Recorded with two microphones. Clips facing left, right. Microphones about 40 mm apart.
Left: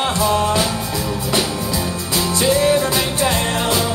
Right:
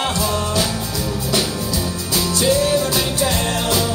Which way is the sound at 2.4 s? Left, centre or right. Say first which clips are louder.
Left 2 dB; left.